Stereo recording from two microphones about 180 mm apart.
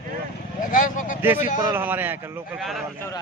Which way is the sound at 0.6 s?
50° left (ahead or behind).